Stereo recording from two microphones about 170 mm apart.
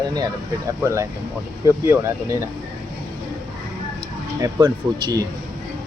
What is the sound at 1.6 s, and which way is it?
Speech, 15° right (ahead or behind).